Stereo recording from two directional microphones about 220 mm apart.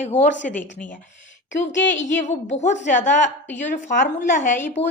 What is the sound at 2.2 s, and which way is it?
A woman's voice, 30° left (ahead or behind).